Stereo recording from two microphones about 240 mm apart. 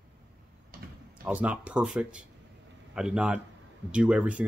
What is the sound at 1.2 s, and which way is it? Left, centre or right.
Speech, centre.